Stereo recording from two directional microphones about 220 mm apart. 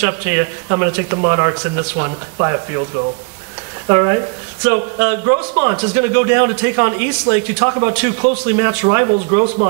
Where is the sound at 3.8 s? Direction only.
20° right (ahead or behind).